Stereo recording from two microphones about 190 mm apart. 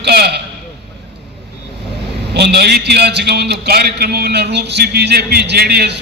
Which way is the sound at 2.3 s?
60° right (ahead or behind).